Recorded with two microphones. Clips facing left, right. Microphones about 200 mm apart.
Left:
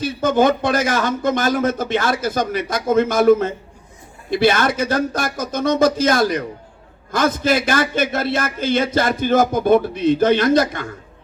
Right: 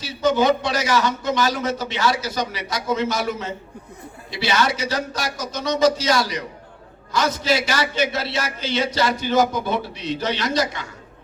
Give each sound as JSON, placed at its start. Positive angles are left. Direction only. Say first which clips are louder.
{"t": 0.0, "sound": "a man's voice", "louder": "left 3 dB", "side_deg": 50}